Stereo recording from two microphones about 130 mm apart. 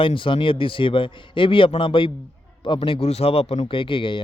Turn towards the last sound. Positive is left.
turn(degrees=40)  # may be behind; listen again after turning